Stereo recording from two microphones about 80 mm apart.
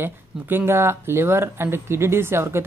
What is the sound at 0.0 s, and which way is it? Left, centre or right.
Speech, right.